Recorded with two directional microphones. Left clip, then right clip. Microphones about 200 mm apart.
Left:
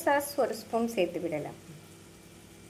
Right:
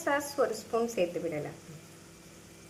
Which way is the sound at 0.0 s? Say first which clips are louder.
Left 2 dB; 10° left (ahead or behind).